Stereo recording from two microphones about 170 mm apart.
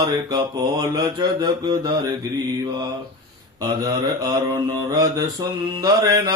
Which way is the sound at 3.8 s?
20° right (ahead or behind).